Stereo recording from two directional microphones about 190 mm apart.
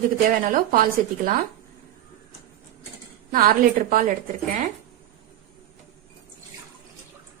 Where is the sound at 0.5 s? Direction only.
50° right (ahead or behind).